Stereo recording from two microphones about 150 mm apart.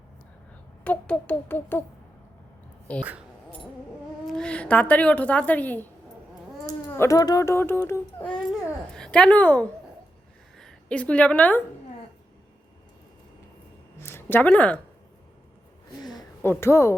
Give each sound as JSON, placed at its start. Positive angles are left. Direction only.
{"t": 0.9, "sound": "a woman's voice", "side_deg": 10}
{"t": 3.0, "sound": "speech", "side_deg": -10}
{"t": 4.3, "sound": "a woman's voice", "side_deg": 5}
{"t": 14.0, "sound": "speech", "side_deg": 15}
{"t": 16.0, "sound": "a sound", "side_deg": 25}
{"t": 16.4, "sound": "a woman's voice", "side_deg": 15}